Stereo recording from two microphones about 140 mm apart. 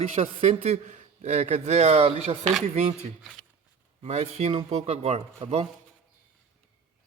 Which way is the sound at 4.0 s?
45° right (ahead or behind).